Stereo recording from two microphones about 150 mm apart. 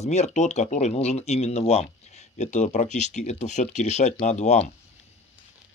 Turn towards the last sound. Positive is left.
turn(degrees=50)  # may be behind; listen again after turning